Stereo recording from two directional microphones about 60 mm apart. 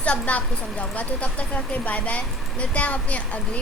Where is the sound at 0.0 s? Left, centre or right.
Left.